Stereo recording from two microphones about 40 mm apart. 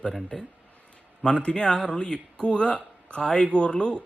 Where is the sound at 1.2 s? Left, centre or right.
Left.